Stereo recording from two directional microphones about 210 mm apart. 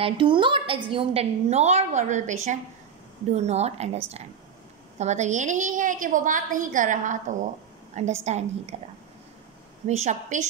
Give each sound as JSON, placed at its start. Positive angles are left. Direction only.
{"t": 0.0, "sound": "a woman's voice", "side_deg": -25}
{"t": 9.8, "sound": "a woman's voice", "side_deg": -30}